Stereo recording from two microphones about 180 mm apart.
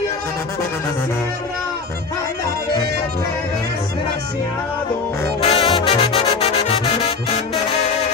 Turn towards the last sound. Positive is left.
turn(degrees=30)  # may be behind; listen again after turning